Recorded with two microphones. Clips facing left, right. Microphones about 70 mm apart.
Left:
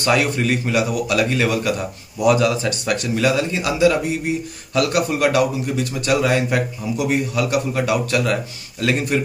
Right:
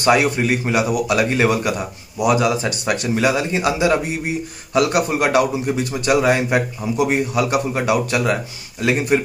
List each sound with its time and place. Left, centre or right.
0.0 s speech: right